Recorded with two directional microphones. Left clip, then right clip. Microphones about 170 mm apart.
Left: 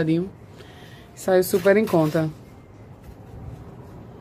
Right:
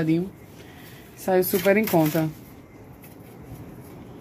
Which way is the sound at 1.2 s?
10° left (ahead or behind).